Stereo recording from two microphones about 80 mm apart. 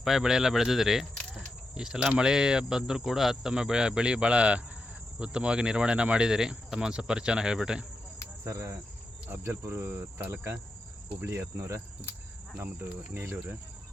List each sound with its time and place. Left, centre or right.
0.0 s speech: centre
8.4 s cricket: right
9.3 s speech: right
11.2 s cricket: right
13.1 s speech: right